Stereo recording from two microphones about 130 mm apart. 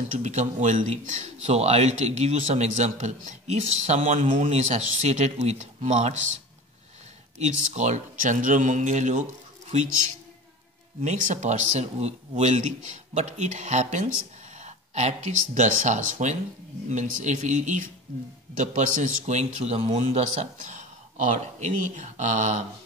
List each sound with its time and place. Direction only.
0.2 s a man's voice: 65° right (ahead or behind)
1.4 s a man's voice: 55° right (ahead or behind)
7.3 s speech: 60° right (ahead or behind)
11.0 s a man's voice: 65° right (ahead or behind)